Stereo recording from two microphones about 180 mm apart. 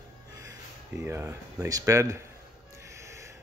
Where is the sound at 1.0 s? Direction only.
15° right (ahead or behind).